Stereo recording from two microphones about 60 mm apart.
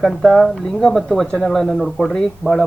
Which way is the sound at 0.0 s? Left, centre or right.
Centre.